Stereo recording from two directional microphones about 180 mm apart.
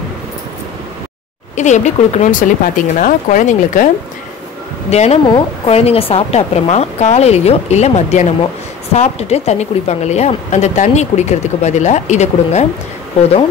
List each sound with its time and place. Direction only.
1.5 s speech: 40° left (ahead or behind)
4.9 s speech: 35° left (ahead or behind)